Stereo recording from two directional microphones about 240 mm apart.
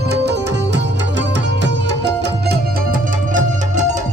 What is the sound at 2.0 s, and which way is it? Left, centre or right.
Music, right.